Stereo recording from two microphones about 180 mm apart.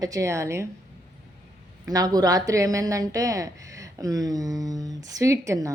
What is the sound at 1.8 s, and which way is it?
A woman's voice, 20° right (ahead or behind).